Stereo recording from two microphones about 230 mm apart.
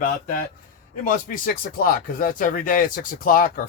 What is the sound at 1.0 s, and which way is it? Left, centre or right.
Speech, left.